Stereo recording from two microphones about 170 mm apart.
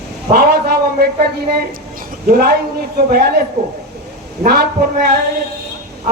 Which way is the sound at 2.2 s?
60° right (ahead or behind).